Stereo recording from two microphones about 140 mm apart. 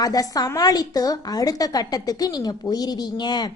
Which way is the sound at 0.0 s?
25° left (ahead or behind).